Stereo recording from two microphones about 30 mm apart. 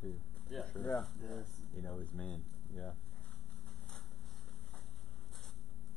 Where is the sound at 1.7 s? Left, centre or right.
Left.